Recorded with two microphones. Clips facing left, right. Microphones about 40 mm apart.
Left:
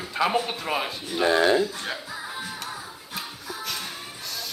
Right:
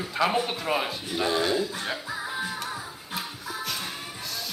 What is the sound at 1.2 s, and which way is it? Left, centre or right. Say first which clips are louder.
Speech: left 6 dB; left.